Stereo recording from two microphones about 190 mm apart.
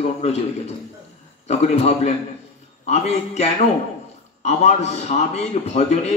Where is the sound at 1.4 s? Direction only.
35° left (ahead or behind).